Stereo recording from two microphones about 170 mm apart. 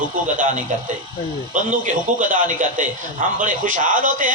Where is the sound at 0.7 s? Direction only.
50° right (ahead or behind).